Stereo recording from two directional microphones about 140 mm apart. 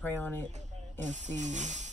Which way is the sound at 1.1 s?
60° right (ahead or behind).